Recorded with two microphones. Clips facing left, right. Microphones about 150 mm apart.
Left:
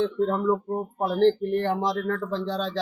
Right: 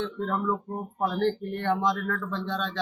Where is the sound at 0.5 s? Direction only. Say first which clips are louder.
Left 5 dB; 10° left (ahead or behind).